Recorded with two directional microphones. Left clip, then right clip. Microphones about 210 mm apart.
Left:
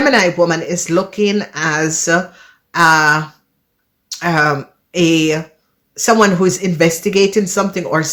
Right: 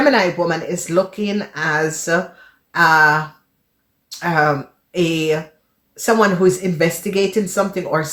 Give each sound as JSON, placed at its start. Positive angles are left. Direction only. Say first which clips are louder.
{"t": 0.0, "sound": "speech", "louder": "left 3 dB", "side_deg": 40}